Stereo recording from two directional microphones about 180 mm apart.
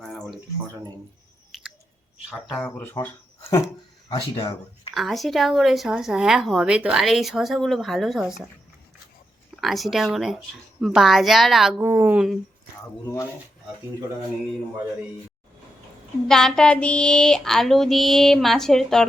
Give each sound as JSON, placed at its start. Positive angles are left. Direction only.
{"t": 0.0, "sound": "a sound", "side_deg": 0}
{"t": 1.5, "sound": "chewing", "side_deg": 0}
{"t": 2.5, "sound": "speech", "side_deg": 10}
{"t": 4.9, "sound": "a woman's voice", "side_deg": 0}
{"t": 9.6, "sound": "a woman's voice", "side_deg": 0}
{"t": 11.8, "sound": "speech", "side_deg": -10}
{"t": 16.3, "sound": "a woman's voice", "side_deg": 5}